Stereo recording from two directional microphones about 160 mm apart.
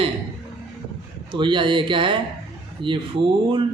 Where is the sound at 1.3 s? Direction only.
30° right (ahead or behind).